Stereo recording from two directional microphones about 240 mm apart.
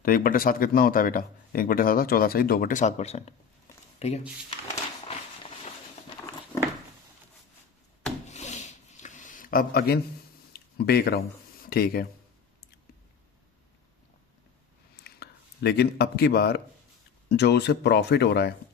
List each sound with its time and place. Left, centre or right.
0.0 s a man's voice: left
4.7 s a sound: left
8.3 s zipper: left
10.5 s a sound: left
11.6 s speech: left
15.0 s a man's voice: left